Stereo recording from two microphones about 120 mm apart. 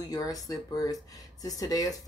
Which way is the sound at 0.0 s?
30° left (ahead or behind).